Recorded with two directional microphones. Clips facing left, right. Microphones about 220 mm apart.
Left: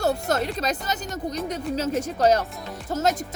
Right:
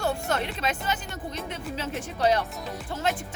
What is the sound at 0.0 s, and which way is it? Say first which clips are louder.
Speech: left 4 dB; 40° left (ahead or behind).